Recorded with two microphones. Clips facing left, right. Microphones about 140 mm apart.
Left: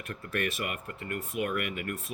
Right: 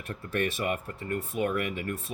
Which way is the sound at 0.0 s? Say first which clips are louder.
Right 3 dB; 35° right (ahead or behind).